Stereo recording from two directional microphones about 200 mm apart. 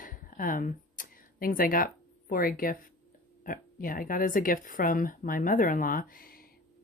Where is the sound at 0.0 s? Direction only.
40° left (ahead or behind).